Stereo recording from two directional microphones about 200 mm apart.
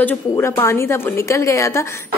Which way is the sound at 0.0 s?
10° left (ahead or behind).